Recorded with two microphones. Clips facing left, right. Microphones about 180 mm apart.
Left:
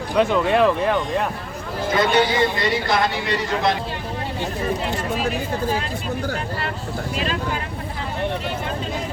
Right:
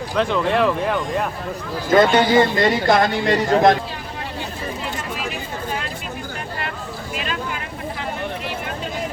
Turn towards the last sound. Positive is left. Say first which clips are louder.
# left 3 dB
turn(degrees=35)  # may be behind; listen again after turning